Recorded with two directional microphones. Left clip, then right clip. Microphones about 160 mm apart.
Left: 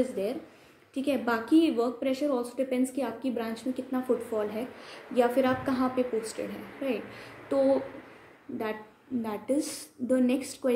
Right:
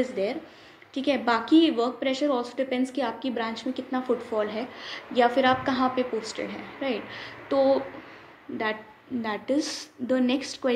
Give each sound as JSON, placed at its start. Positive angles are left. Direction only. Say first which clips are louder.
{"t": 0.0, "sound": "a woman's voice", "louder": "right 3 dB", "side_deg": 15}
{"t": 9.2, "sound": "a woman's voice", "louder": "right 3 dB", "side_deg": 15}